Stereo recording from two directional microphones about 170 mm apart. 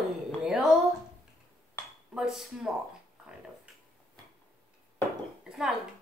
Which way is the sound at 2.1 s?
5° right (ahead or behind).